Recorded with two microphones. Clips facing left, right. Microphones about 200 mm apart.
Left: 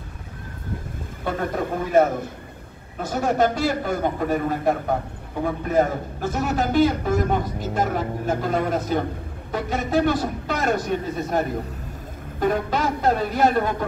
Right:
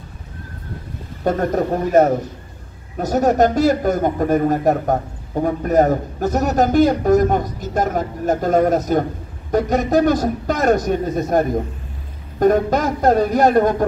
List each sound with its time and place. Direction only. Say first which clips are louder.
1.2 s a man's voice: right 7 dB; 45° right (ahead or behind)